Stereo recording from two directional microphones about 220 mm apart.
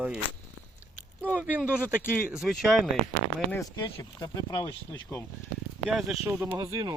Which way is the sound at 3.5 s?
15° left (ahead or behind).